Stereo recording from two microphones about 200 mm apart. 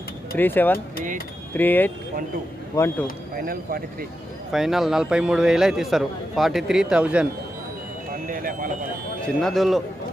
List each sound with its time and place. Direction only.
0.3 s speech: 10° left (ahead or behind)
3.3 s speech: 45° right (ahead or behind)
4.5 s a man's voice: centre (ahead or behind)
8.1 s speech: 45° right (ahead or behind)
9.2 s a man's voice: centre (ahead or behind)